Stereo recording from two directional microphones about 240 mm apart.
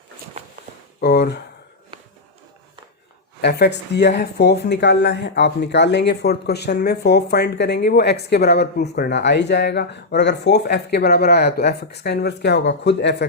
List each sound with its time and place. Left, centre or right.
1.0 s speech: left
3.4 s speech: left